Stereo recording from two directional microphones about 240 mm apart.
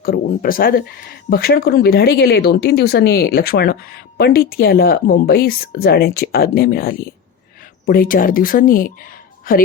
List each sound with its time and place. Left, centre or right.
0.0 s speech: left